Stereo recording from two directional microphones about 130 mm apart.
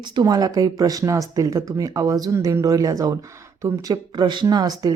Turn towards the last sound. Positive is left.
turn(degrees=-30)  # may be behind; listen again after turning